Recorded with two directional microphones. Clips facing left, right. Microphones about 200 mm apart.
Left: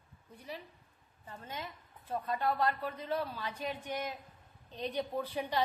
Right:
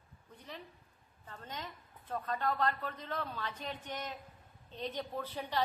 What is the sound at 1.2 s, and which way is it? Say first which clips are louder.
A woman's voice: left 2 dB; 10° left (ahead or behind).